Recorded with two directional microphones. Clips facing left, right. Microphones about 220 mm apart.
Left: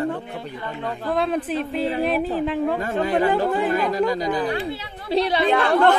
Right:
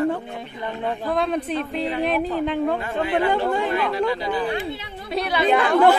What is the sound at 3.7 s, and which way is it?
Speech, 40° left (ahead or behind).